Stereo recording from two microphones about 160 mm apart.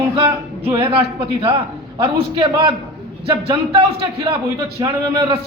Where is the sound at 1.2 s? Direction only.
35° right (ahead or behind).